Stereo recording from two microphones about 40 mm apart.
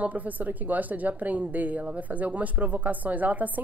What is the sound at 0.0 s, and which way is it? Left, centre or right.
Speech, right.